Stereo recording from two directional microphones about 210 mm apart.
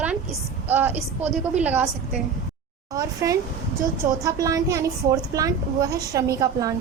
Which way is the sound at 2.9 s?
15° right (ahead or behind).